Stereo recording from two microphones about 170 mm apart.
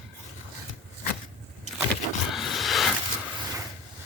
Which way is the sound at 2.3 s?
Centre (ahead or behind).